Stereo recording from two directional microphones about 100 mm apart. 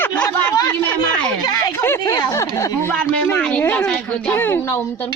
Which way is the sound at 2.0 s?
40° left (ahead or behind).